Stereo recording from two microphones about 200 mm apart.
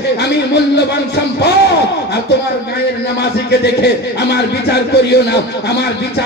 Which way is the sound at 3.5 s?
55° left (ahead or behind).